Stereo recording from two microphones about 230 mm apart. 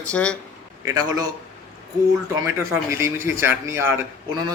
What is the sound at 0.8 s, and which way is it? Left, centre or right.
Speech, centre.